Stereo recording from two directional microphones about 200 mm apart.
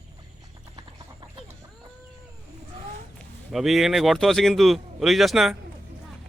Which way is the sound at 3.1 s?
Centre (ahead or behind).